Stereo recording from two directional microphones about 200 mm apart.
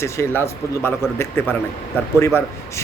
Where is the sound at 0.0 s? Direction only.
15° left (ahead or behind).